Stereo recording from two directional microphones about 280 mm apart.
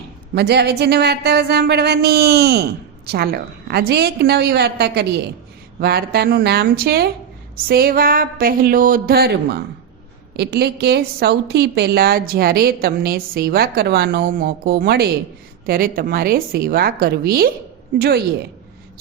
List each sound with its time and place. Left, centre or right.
0.3 s a woman's voice: right